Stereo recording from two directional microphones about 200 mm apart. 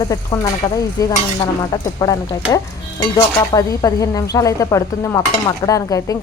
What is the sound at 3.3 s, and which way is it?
Speech, 15° left (ahead or behind).